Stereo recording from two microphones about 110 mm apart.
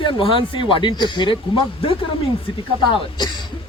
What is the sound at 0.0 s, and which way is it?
Speech, 50° left (ahead or behind).